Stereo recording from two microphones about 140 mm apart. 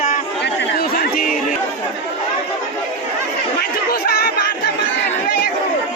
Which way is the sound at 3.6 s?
90° left.